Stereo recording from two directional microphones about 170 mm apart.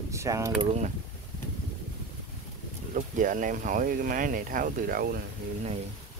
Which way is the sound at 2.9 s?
50° right (ahead or behind).